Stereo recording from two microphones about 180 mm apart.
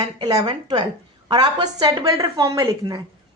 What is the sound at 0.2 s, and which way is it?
A woman's voice, 20° right (ahead or behind).